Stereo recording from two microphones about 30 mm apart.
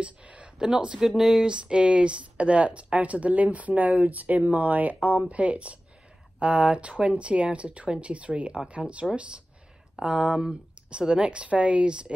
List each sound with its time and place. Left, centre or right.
0.0 s a sound: right
0.6 s speech: right
1.0 s speech: centre
1.4 s speech: right
3.9 s speech: right
4.2 s speech: right
6.4 s speech: right
10.0 s speech: right
10.9 s speech: right